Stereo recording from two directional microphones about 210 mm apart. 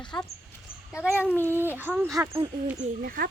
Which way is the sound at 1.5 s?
10° right (ahead or behind).